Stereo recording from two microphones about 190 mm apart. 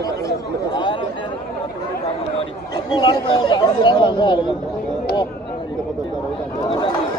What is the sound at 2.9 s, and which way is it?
Speech, 25° left (ahead or behind).